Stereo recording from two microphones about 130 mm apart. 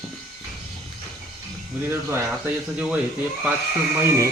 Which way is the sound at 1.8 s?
20° right (ahead or behind).